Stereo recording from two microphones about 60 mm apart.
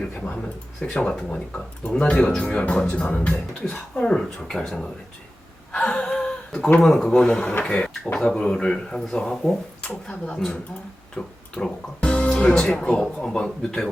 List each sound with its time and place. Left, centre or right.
0.2 s speech: centre
5.7 s gasp: centre
6.7 s speech: centre
10.1 s speech: centre